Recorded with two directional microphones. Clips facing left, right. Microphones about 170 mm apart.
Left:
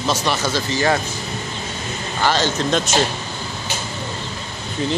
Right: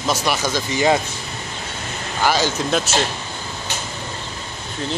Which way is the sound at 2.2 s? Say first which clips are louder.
Even; 10° right (ahead or behind).